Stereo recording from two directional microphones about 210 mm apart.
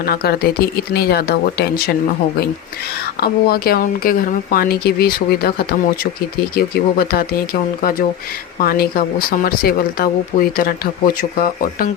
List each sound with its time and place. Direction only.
0.0 s speech: 45° left (ahead or behind)
3.2 s speech: 45° left (ahead or behind)